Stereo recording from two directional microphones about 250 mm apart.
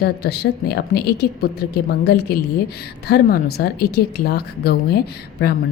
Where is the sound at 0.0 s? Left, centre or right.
Left.